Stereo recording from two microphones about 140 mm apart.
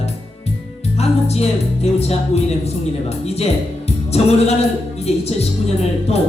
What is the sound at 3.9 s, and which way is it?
Music, 50° left (ahead or behind).